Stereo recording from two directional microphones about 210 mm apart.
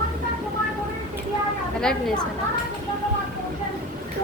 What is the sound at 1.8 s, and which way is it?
Speech, 5° left (ahead or behind).